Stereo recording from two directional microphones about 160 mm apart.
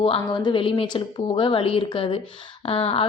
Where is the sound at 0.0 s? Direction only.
35° left (ahead or behind).